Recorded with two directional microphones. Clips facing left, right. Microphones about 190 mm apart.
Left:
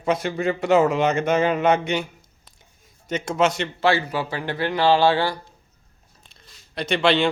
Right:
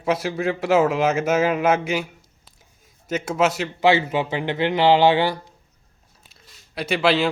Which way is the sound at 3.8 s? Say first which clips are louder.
Right 3 dB; 20° right (ahead or behind).